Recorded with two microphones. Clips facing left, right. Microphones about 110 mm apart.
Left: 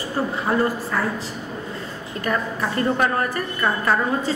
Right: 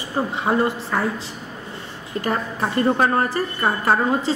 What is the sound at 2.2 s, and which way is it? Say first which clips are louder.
A woman's voice: even; 30° right (ahead or behind).